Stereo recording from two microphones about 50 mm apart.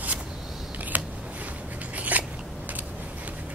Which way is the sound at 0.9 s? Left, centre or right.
Right.